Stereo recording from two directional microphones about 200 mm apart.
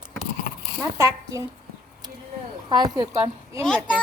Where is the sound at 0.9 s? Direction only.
15° right (ahead or behind).